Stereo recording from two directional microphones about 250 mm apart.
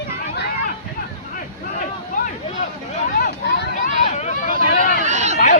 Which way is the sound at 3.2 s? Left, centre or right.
Left.